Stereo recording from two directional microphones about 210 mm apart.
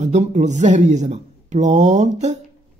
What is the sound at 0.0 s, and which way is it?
A man's voice, 35° right (ahead or behind).